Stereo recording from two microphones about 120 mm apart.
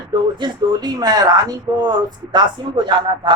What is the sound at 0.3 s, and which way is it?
Speech, 40° right (ahead or behind).